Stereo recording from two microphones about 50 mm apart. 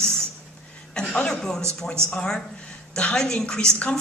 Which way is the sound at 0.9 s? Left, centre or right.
Centre.